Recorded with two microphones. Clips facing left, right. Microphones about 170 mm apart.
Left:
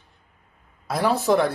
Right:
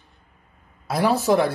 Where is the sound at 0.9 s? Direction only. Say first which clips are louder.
Right 1 dB; 5° right (ahead or behind).